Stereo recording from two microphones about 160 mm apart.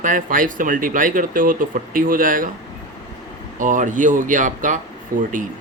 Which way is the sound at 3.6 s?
55° right (ahead or behind).